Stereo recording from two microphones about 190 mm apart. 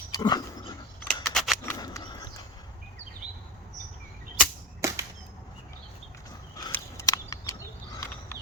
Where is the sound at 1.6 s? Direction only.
15° left (ahead or behind).